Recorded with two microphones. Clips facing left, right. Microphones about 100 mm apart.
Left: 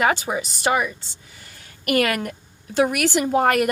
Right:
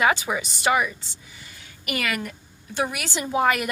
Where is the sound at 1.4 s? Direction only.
55° left (ahead or behind).